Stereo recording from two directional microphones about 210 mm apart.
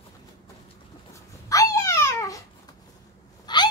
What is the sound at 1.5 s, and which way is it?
Babbling, 15° left (ahead or behind).